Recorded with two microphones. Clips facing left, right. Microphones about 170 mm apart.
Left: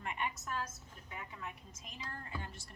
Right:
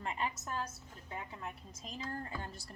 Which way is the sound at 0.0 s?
30° right (ahead or behind).